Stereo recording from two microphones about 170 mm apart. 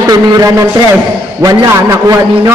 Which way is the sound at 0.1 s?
20° right (ahead or behind).